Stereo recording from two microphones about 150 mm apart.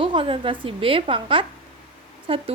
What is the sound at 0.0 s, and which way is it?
A woman's voice, 35° right (ahead or behind).